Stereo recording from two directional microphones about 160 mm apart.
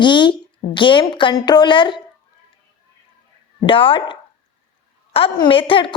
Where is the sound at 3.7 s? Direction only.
35° left (ahead or behind).